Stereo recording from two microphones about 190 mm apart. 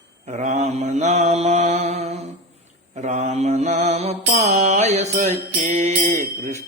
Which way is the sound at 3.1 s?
35° right (ahead or behind).